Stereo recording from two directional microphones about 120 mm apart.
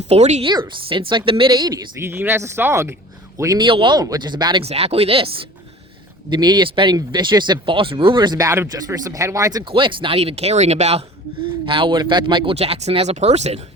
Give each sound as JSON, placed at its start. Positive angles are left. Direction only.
{"t": 0.1, "sound": "a woman's voice", "side_deg": -65}
{"t": 0.9, "sound": "speech", "side_deg": -45}
{"t": 2.0, "sound": "a man's voice", "side_deg": -20}
{"t": 3.6, "sound": "speech", "side_deg": -45}
{"t": 4.6, "sound": "speech", "side_deg": -60}
{"t": 6.3, "sound": "speech", "side_deg": -35}
{"t": 8.4, "sound": "speech", "side_deg": -20}
{"t": 9.7, "sound": "speech", "side_deg": -45}
{"t": 11.6, "sound": "speech", "side_deg": -45}
{"t": 12.5, "sound": "speech", "side_deg": -60}